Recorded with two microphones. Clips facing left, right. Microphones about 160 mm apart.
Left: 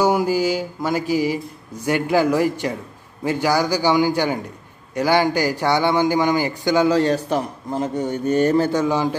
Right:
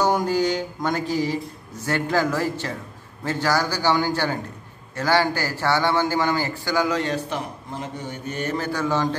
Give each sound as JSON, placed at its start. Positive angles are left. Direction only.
{"t": 0.0, "sound": "speech", "side_deg": 10}
{"t": 6.9, "sound": "a man's voice", "side_deg": 35}
{"t": 8.7, "sound": "speech", "side_deg": 15}